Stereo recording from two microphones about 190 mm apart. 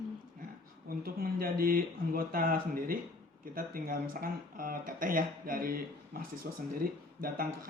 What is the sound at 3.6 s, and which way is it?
Speech, 50° right (ahead or behind).